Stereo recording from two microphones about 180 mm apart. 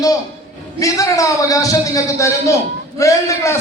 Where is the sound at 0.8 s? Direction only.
20° left (ahead or behind).